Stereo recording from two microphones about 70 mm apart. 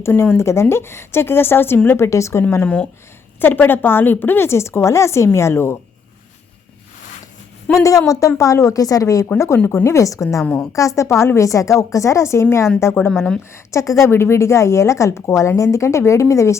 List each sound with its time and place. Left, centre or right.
0.0 s a woman's voice: left
2.0 s speech: left
3.4 s a woman's voice: left
7.7 s speech: left
9.6 s speech: left
10.4 s a woman's voice: centre
10.7 s a woman's voice: left
13.5 s speech: left
14.0 s speech: left